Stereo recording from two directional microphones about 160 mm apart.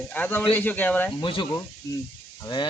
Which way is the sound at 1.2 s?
30° left (ahead or behind).